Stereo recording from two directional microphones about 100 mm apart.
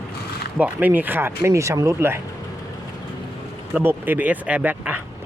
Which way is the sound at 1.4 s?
30° right (ahead or behind).